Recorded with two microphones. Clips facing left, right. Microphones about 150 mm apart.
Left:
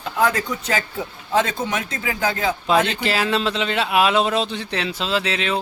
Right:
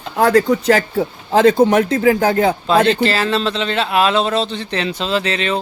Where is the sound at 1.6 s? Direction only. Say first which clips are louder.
Right 13 dB; 55° right (ahead or behind).